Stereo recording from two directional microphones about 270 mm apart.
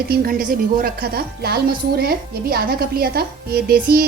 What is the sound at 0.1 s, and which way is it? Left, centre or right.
Speech, right.